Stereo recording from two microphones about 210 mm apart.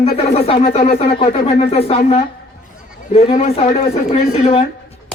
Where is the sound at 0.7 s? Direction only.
40° left (ahead or behind).